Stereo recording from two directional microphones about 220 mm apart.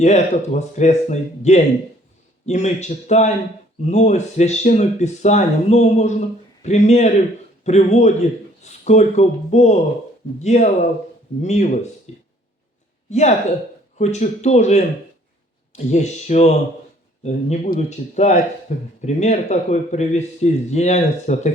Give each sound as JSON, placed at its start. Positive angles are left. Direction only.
{"t": 0.0, "sound": "speech", "side_deg": 30}
{"t": 12.1, "sound": "a sound", "side_deg": 30}
{"t": 13.1, "sound": "speech", "side_deg": 30}